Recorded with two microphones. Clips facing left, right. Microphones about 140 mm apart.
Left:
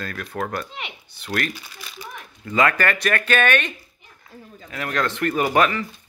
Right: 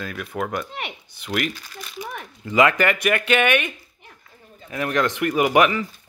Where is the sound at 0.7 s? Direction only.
50° right (ahead or behind).